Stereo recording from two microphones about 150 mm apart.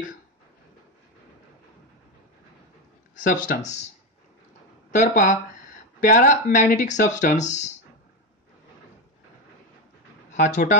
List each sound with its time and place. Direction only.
3.2 s speech: 60° left (ahead or behind)
4.9 s speech: 60° left (ahead or behind)
10.3 s speech: 55° left (ahead or behind)